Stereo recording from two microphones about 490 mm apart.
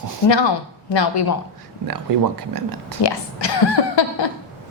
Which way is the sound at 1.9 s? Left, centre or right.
Right.